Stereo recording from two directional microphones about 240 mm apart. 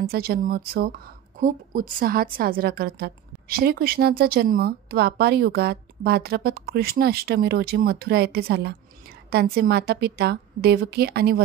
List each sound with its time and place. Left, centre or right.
0.0 s speech: right